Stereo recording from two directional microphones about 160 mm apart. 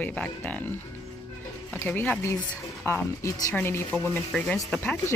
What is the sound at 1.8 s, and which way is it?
Music, 10° left (ahead or behind).